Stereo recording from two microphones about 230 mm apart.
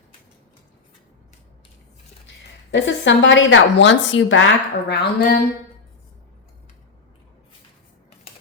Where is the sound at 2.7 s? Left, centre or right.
Left.